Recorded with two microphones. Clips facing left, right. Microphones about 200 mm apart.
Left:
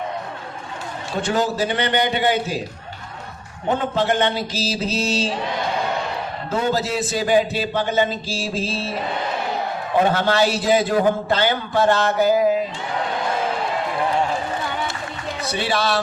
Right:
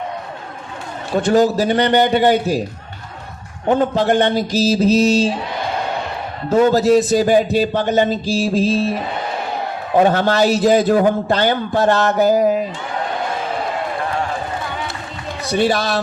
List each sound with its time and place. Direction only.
1.1 s a man's voice: 40° right (ahead or behind)
3.9 s a man's voice: 45° right (ahead or behind)
6.5 s a man's voice: 40° right (ahead or behind)
10.1 s a man's voice: 40° right (ahead or behind)
15.5 s a man's voice: 45° right (ahead or behind)